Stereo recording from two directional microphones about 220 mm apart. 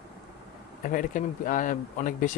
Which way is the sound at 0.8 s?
40° left (ahead or behind).